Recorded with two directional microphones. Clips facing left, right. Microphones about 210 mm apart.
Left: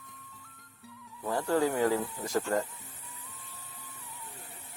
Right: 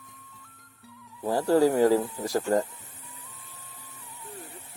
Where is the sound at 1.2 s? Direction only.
35° right (ahead or behind).